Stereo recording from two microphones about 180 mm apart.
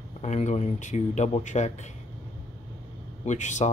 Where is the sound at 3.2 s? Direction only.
40° left (ahead or behind).